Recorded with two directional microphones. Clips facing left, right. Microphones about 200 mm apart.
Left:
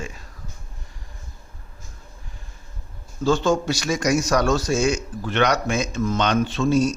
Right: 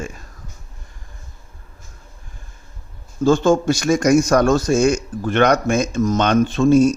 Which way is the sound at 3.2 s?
50° right (ahead or behind).